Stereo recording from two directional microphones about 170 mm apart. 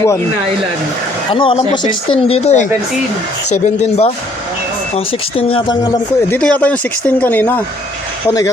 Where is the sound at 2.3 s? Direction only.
40° left (ahead or behind).